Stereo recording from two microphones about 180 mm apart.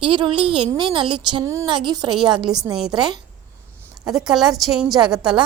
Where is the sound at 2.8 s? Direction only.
Centre (ahead or behind).